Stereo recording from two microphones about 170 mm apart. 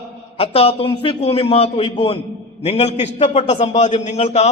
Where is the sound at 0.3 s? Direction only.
35° left (ahead or behind).